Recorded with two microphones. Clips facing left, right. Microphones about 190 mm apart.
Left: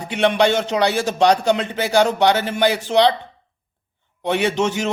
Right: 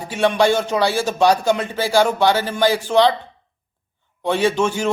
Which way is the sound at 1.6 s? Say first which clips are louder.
Even; 20° left (ahead or behind).